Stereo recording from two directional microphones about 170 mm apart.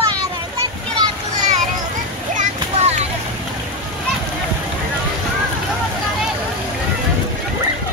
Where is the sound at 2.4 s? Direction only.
40° right (ahead or behind).